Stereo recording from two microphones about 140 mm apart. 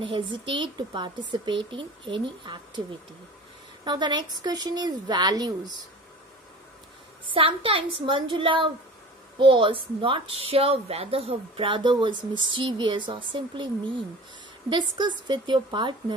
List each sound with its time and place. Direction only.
0.0 s speech: 35° right (ahead or behind)
3.8 s speech: 30° right (ahead or behind)
7.3 s speech: 40° right (ahead or behind)